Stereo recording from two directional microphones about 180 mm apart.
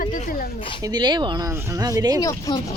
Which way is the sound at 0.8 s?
20° right (ahead or behind).